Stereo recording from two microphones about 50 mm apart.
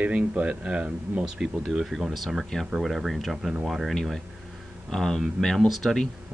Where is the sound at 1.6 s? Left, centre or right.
Centre.